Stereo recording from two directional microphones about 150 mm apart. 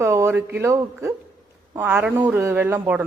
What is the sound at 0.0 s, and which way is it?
Speech, 15° right (ahead or behind).